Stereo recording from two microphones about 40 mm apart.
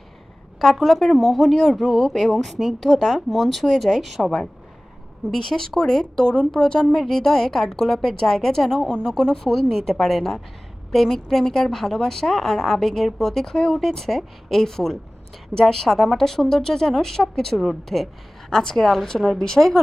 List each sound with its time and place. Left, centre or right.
0.6 s speech: centre
1.8 s speech: centre
2.0 s speech: centre
5.3 s speech: centre
17.6 s speech: centre